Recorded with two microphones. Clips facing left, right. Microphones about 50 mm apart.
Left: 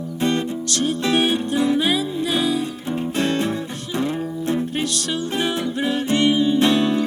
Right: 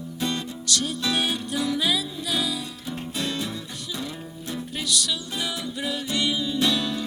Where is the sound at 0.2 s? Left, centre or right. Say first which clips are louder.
Left 8 dB; left.